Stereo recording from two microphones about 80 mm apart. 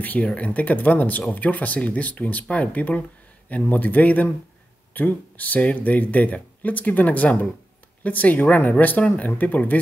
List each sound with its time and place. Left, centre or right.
0.0 s speech: centre